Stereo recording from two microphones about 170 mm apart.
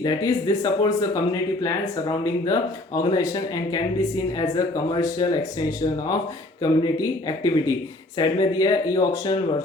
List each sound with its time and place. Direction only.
0.0 s speech: 20° left (ahead or behind)